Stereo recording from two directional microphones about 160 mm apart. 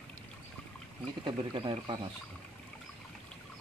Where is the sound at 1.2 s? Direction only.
30° right (ahead or behind).